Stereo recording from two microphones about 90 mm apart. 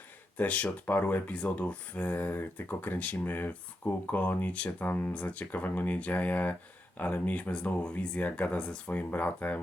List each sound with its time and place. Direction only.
0.3 s speech: 15° left (ahead or behind)